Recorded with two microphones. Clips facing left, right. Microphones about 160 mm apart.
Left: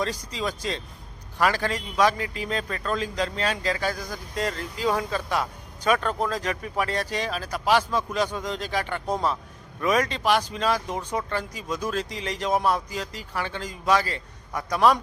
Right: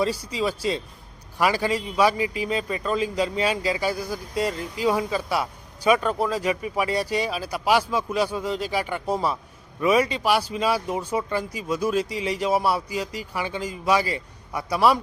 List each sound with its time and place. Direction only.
0.0 s a man's voice: 10° right (ahead or behind)